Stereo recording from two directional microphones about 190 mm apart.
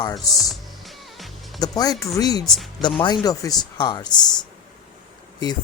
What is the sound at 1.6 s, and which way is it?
Speech, 20° left (ahead or behind).